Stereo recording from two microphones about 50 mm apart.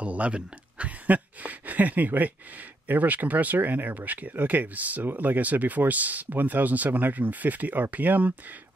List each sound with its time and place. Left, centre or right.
0.0 s speech: right